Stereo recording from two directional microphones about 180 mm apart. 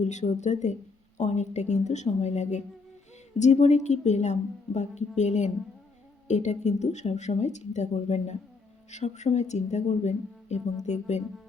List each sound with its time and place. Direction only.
0.0 s a woman's voice: 40° left (ahead or behind)